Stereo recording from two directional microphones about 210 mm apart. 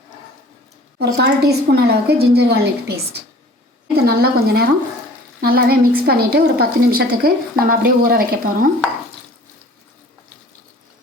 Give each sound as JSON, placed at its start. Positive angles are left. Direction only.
{"t": 0.9, "sound": "a woman's voice", "side_deg": -50}